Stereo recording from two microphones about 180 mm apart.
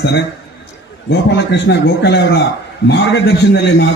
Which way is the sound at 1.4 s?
75° left (ahead or behind).